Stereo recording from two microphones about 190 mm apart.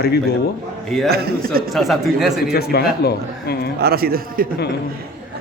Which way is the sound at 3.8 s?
55° right (ahead or behind).